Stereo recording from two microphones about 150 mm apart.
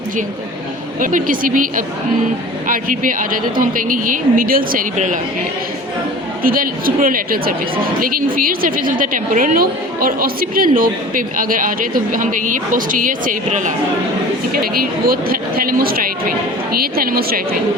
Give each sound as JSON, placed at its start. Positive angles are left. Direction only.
{"t": 0.9, "sound": "speech", "side_deg": -65}
{"t": 6.4, "sound": "a woman's voice", "side_deg": -75}
{"t": 14.5, "sound": "a woman's voice", "side_deg": -75}